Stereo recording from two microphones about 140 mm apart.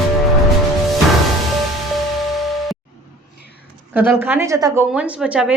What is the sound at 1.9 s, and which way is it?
Music, centre (ahead or behind).